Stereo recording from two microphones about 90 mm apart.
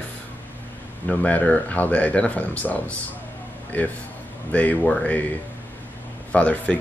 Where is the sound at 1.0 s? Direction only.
15° left (ahead or behind).